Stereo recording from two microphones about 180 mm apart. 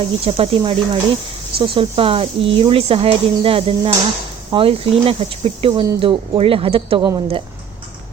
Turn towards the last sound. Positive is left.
turn(degrees=-25)  # may be behind; listen again after turning